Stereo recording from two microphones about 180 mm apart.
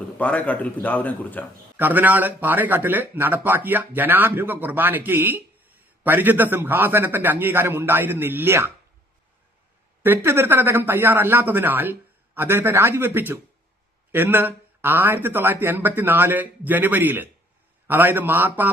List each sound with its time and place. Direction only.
0.2 s speech: 10° left (ahead or behind)
1.7 s speech: 10° right (ahead or behind)
10.0 s speech: 10° right (ahead or behind)